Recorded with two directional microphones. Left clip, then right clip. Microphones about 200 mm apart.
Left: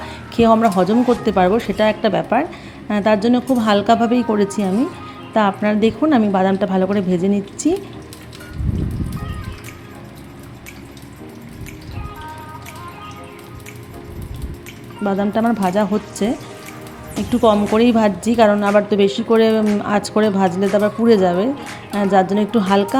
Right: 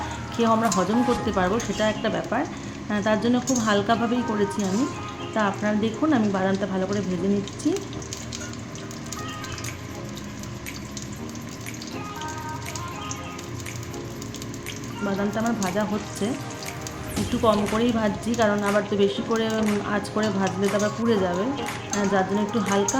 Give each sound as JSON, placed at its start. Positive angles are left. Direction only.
{"t": 0.3, "sound": "a woman's voice", "side_deg": 30}
{"t": 15.0, "sound": "a woman's voice", "side_deg": 35}
{"t": 17.4, "sound": "a woman's voice", "side_deg": 35}